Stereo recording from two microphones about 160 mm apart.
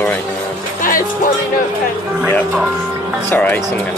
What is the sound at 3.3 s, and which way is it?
Speech, 10° left (ahead or behind).